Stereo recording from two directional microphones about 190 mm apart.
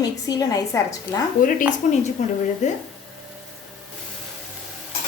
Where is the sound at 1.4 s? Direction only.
45° left (ahead or behind).